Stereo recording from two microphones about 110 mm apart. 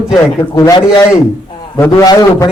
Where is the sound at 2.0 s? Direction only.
35° left (ahead or behind).